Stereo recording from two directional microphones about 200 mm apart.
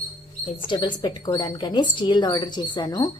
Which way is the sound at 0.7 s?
25° left (ahead or behind).